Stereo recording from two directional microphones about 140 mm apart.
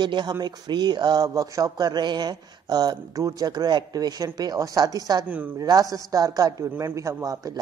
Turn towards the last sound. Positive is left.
turn(degrees=-25)  # may be behind; listen again after turning